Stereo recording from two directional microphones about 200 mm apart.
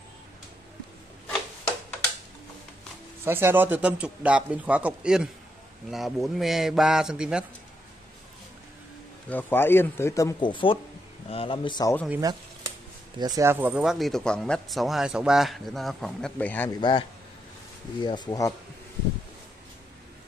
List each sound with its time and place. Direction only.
3.3 s a man's voice: 10° right (ahead or behind)
9.3 s speech: 10° left (ahead or behind)
12.1 s a man's voice: 15° right (ahead or behind); by 16.7 s 10° left (ahead or behind)
18.0 s speech: 20° left (ahead or behind)